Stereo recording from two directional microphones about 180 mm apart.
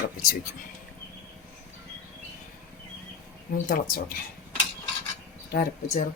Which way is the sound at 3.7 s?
55° left (ahead or behind).